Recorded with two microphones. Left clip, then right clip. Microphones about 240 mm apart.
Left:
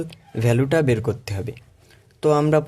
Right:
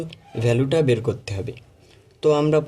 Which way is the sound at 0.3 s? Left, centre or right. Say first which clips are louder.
Even; left.